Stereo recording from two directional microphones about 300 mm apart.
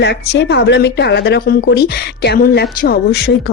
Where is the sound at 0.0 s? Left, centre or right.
Left.